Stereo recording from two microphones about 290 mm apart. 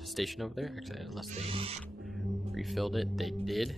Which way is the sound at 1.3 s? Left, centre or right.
Centre.